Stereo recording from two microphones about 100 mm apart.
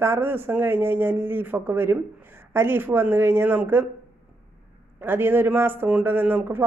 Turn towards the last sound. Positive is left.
turn(degrees=-20)  # may be behind; listen again after turning